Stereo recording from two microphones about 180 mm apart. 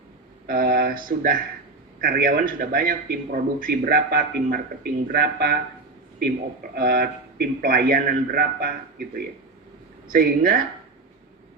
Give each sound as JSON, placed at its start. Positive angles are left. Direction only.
{"t": 0.4, "sound": "a man's voice", "side_deg": -55}